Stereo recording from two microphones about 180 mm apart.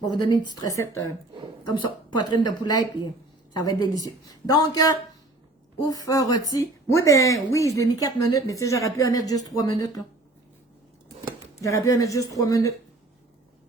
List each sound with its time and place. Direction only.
0.1 s a woman's voice: 20° left (ahead or behind)
11.6 s speech: 20° left (ahead or behind)